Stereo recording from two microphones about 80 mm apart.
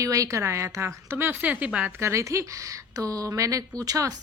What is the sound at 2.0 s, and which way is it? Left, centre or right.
A woman's voice, right.